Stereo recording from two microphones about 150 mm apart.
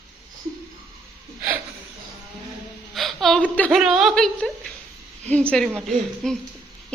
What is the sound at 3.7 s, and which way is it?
Speech, centre (ahead or behind).